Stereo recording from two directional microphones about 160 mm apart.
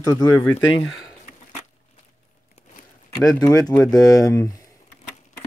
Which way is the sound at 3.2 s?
25° left (ahead or behind).